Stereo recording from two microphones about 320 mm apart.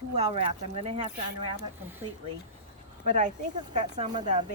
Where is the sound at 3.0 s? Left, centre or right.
Right.